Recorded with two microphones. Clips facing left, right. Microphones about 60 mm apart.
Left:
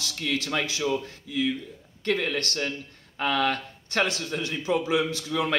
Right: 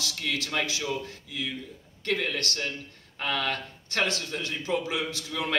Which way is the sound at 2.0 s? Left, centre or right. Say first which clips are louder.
Left 2 dB; left.